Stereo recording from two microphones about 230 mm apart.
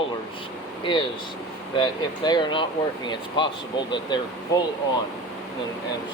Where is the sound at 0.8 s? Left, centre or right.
Left.